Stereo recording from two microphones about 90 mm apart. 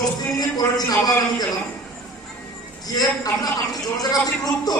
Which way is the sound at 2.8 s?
45° left (ahead or behind).